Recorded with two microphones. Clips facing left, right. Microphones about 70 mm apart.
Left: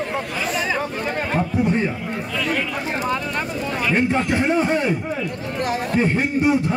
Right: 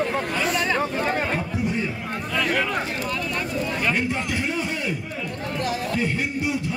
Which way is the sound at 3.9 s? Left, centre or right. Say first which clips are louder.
Left 6 dB; left.